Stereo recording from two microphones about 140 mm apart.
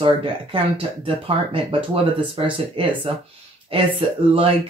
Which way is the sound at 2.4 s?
35° right (ahead or behind).